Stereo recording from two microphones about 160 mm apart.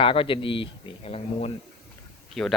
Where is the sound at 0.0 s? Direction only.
35° left (ahead or behind).